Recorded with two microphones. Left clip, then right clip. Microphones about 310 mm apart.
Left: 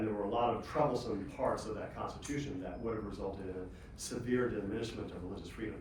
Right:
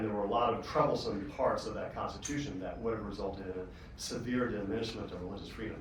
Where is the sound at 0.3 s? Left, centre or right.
Centre.